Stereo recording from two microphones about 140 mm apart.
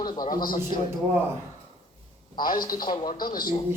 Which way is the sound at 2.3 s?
90° left.